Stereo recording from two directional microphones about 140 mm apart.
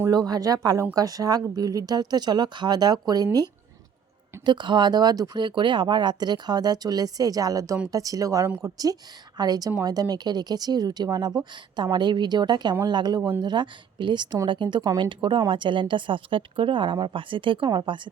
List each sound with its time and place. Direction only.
0.0 s speech: 30° right (ahead or behind)
4.4 s speech: 35° right (ahead or behind)